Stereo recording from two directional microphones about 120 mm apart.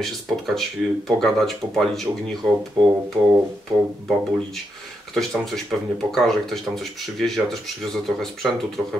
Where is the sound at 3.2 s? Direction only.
35° right (ahead or behind).